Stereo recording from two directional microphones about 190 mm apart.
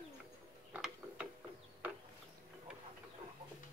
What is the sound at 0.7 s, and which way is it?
Mechanisms, 5° right (ahead or behind).